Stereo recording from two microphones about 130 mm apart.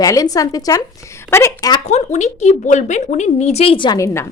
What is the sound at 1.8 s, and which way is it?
A woman's voice, 60° left (ahead or behind).